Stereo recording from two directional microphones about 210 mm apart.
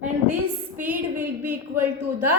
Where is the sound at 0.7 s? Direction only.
10° right (ahead or behind).